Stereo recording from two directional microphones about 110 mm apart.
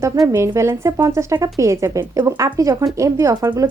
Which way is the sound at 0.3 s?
25° right (ahead or behind).